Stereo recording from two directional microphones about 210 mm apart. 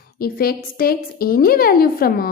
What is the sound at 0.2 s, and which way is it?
A woman's voice, 45° left (ahead or behind).